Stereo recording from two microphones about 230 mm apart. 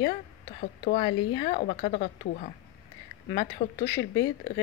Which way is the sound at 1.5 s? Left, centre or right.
Left.